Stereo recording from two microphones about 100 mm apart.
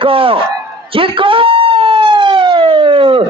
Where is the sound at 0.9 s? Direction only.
65° right (ahead or behind).